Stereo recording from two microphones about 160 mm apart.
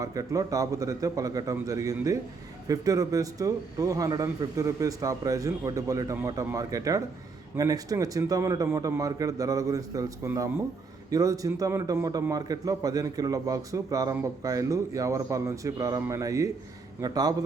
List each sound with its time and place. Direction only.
0.0 s a man's voice: 20° right (ahead or behind)